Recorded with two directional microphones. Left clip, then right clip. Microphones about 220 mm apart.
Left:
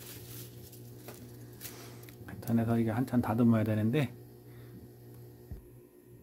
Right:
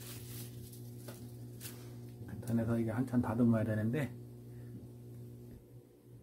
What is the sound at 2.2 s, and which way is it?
Speech, 45° left (ahead or behind).